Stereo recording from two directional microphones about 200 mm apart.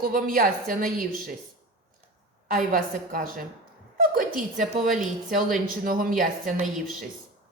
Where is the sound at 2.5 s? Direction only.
45° right (ahead or behind).